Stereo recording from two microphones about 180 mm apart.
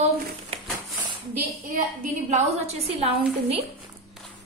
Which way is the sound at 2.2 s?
35° right (ahead or behind).